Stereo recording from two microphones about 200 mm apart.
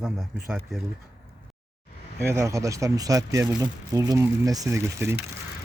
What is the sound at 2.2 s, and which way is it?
Speech, 15° right (ahead or behind).